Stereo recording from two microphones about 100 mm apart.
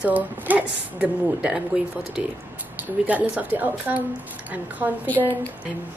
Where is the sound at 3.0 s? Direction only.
15° right (ahead or behind).